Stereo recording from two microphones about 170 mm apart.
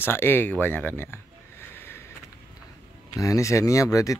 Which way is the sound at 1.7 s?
15° left (ahead or behind).